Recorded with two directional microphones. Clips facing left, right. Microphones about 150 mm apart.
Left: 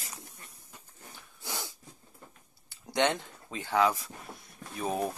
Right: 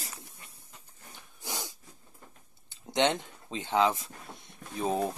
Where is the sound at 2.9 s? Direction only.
20° right (ahead or behind).